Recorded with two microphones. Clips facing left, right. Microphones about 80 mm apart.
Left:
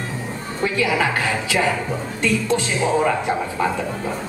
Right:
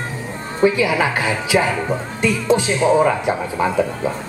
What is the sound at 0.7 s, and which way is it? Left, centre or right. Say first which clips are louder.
A man's voice: right 2 dB; centre.